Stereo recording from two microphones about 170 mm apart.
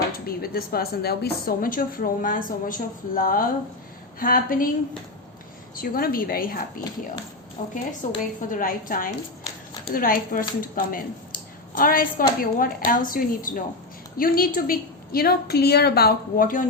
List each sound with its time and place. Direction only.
0.3 s a woman's voice: 60° left (ahead or behind)
5.7 s a woman's voice: 55° left (ahead or behind)
7.6 s a woman's voice: 45° left (ahead or behind)